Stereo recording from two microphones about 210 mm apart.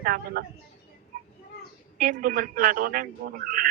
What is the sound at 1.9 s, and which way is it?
A man's voice, 40° right (ahead or behind).